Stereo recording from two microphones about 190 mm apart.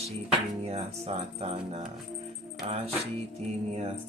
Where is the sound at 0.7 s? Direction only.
35° right (ahead or behind).